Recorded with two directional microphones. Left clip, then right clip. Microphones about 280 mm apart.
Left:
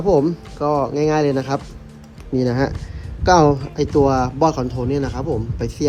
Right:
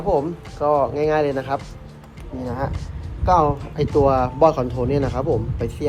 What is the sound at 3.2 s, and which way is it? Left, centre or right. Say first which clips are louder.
Speech: left 4 dB; left.